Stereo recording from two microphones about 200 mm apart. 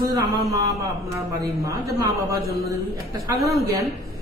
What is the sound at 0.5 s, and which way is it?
A man's voice, 15° right (ahead or behind).